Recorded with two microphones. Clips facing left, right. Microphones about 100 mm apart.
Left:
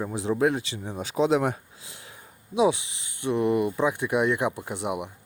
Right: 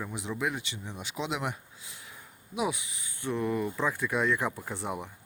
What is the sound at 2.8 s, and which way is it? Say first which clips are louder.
Speech: left 5 dB; 80° left.